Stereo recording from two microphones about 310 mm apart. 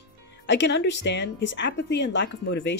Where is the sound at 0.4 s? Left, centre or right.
Left.